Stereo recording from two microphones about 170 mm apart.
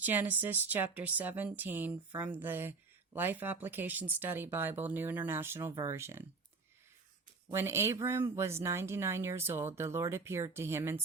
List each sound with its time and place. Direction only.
0.0 s speech: 10° right (ahead or behind)
7.4 s speech: 15° right (ahead or behind)